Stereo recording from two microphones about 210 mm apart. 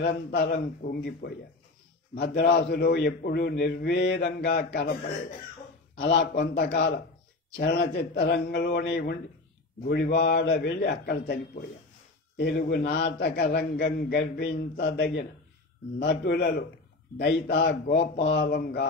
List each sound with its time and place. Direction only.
0.0 s a man's voice: 55° left (ahead or behind)
6.3 s a man's voice: 55° left (ahead or behind)